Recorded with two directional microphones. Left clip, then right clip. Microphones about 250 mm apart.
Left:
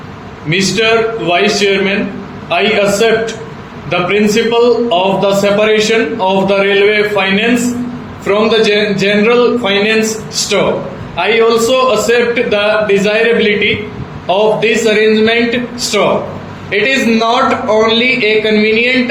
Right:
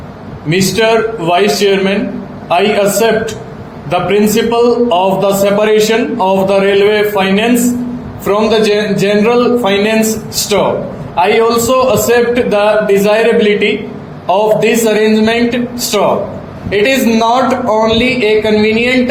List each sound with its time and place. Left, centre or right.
0.5 s a man's voice: right